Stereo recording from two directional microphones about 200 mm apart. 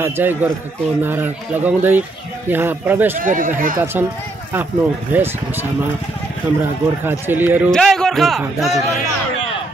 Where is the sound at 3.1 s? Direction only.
40° right (ahead or behind).